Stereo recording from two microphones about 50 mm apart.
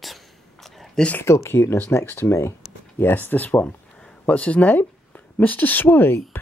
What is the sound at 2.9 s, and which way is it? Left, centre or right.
Speech, left.